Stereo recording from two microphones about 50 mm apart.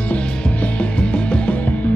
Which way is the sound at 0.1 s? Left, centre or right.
Left.